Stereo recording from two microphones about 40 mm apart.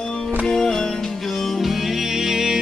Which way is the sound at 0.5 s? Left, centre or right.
Centre.